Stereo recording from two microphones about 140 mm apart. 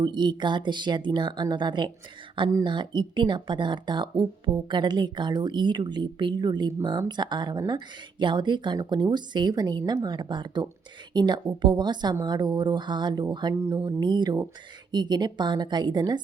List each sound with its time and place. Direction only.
0.0 s speech: 35° right (ahead or behind)
13.5 s speech: 20° right (ahead or behind)
14.0 s speech: 30° right (ahead or behind)